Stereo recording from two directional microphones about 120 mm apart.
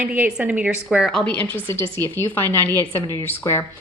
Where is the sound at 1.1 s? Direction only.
5° left (ahead or behind).